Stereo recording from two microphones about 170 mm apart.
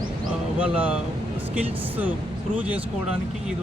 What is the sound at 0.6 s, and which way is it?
Speech, 10° right (ahead or behind).